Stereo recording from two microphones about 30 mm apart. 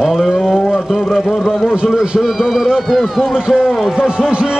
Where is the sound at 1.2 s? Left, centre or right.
Centre.